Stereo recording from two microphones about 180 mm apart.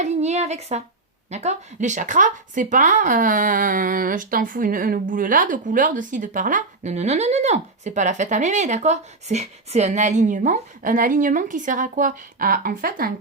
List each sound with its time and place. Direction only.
0.0 s speech: 40° right (ahead or behind)